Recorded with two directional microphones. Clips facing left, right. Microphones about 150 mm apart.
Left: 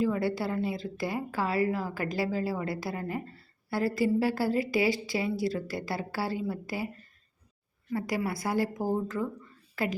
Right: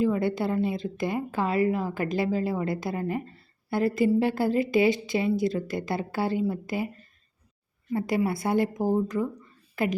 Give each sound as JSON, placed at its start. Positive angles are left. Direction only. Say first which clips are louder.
{"t": 0.0, "sound": "a woman's voice", "louder": "right 3 dB", "side_deg": -20}
{"t": 7.9, "sound": "a woman's voice", "louder": "right 5 dB", "side_deg": -25}